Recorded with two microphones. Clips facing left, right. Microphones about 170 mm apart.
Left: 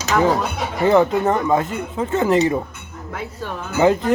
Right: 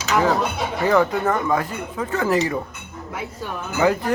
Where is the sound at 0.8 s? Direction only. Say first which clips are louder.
Left 4 dB; 25° left (ahead or behind).